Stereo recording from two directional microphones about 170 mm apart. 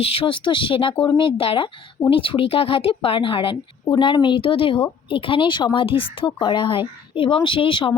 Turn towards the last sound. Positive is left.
turn(degrees=30)  # may be behind; listen again after turning